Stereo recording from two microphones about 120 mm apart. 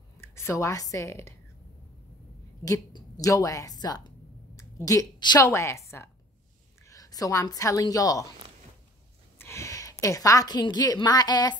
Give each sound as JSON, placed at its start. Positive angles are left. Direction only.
{"t": 0.2, "sound": "a woman's voice", "side_deg": 20}
{"t": 2.6, "sound": "a woman's voice", "side_deg": 30}
{"t": 9.4, "sound": "a woman's voice", "side_deg": 25}